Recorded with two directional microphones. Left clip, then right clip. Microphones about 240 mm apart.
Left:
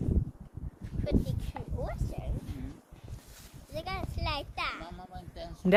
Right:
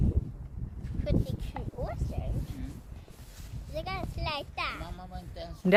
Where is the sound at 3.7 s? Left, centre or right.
Centre.